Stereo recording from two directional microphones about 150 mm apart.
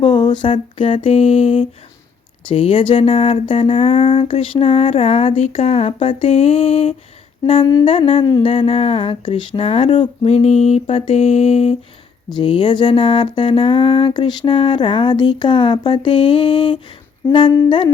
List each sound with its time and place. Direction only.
0.0 s speech: 30° left (ahead or behind)